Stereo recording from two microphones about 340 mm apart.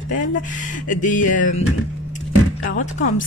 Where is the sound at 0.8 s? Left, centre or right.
Left.